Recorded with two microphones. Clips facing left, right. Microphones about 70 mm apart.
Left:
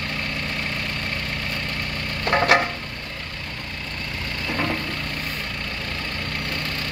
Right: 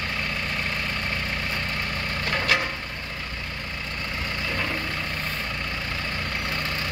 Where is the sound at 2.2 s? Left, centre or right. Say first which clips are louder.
Left 7 dB; left.